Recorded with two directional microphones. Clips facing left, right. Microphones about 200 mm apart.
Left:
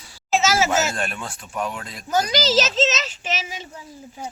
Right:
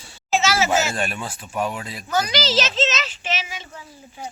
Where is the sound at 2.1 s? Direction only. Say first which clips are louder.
Left 2 dB; 45° left (ahead or behind).